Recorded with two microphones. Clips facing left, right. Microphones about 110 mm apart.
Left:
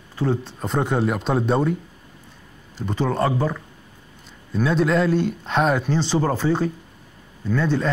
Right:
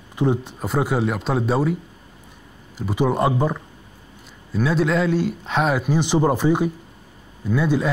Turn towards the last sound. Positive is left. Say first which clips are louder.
# right 1 dB
turn(degrees=-10)  # may be behind; listen again after turning